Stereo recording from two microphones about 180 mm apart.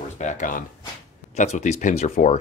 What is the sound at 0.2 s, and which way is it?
Speech, 45° left (ahead or behind).